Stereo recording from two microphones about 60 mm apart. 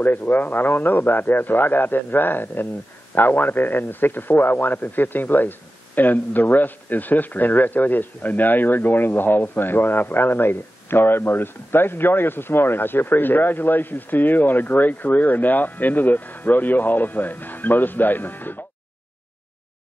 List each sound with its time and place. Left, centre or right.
0.0 s speech: left